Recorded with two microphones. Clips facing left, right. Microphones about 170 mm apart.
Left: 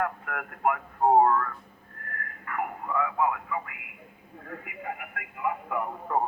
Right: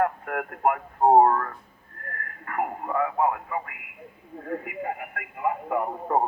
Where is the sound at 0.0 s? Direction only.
35° right (ahead or behind).